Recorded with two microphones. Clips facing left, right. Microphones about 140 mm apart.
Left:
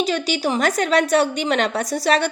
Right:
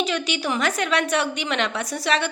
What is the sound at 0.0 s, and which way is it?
A woman's voice, 40° left (ahead or behind).